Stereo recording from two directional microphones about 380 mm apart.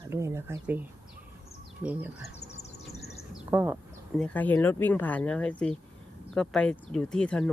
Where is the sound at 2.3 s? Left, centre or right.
Centre.